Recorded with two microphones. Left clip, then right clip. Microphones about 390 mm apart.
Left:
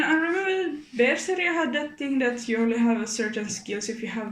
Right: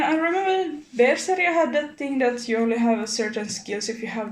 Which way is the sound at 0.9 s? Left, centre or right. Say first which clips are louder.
Right 4 dB; centre.